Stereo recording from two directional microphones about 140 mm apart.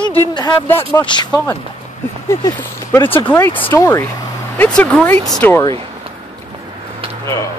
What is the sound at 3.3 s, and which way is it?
Speech, 10° left (ahead or behind).